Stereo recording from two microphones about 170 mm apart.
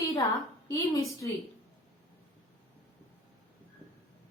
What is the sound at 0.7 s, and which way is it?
Speech, 20° left (ahead or behind).